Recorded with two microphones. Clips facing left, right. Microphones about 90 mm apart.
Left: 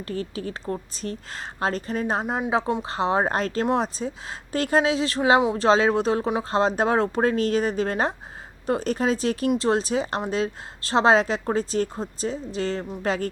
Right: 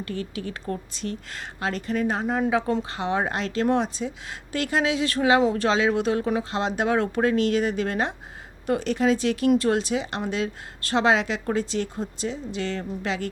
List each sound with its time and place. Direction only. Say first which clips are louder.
0.0 s a woman's voice: left 1 dB; 35° left (ahead or behind)